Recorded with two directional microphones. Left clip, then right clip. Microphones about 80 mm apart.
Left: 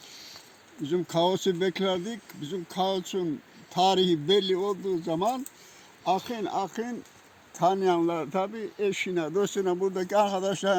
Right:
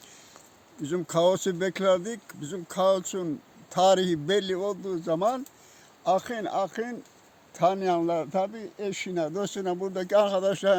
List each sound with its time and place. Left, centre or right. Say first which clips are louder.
0.8 s speech: right 1 dB; right
3.7 s speech: right 1 dB; right